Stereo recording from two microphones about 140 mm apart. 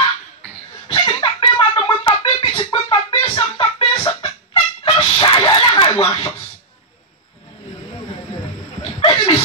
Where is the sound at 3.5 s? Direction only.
40° left (ahead or behind).